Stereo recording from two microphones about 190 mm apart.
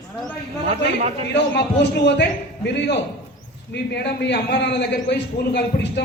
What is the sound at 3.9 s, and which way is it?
A man's voice, 60° left (ahead or behind).